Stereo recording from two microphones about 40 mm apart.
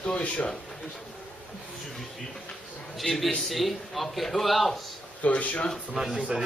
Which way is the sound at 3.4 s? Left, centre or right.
Centre.